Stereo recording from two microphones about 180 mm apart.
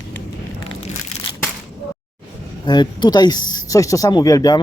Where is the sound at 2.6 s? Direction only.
25° left (ahead or behind).